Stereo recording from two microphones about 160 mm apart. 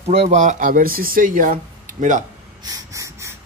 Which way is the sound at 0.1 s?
45° right (ahead or behind).